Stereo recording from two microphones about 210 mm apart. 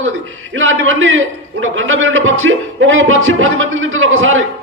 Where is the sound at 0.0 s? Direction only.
70° right (ahead or behind).